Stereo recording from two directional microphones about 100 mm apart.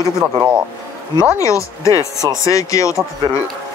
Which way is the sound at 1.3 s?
30° left (ahead or behind).